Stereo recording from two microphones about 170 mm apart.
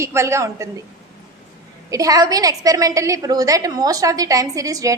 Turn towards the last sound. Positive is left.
turn(degrees=-20)  # may be behind; listen again after turning